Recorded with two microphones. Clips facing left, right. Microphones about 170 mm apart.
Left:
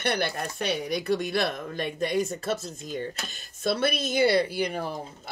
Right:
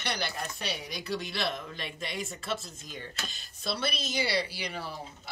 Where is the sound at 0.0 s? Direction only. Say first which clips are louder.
Left 7 dB; 55° left (ahead or behind).